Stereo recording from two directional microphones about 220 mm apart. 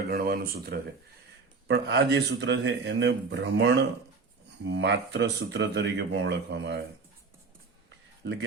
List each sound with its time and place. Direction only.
0.1 s speech: 40° right (ahead or behind)